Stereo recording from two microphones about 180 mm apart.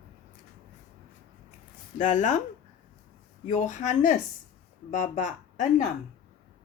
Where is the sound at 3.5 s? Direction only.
45° left (ahead or behind).